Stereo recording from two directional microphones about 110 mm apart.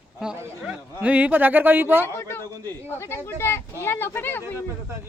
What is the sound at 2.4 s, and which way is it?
Speech, 35° right (ahead or behind).